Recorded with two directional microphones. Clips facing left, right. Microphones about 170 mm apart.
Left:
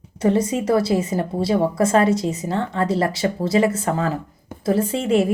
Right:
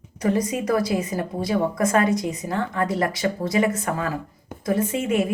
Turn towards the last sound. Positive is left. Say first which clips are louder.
# left 4 dB
turn(degrees=30)  # may be behind; listen again after turning